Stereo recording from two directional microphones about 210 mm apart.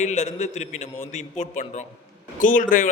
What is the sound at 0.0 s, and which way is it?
A man's voice, 35° left (ahead or behind).